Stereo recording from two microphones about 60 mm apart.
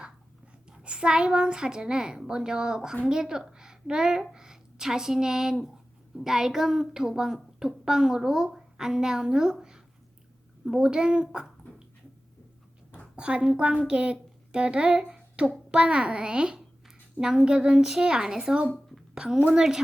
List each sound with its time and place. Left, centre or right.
0.7 s a woman's voice: centre
13.1 s a woman's voice: centre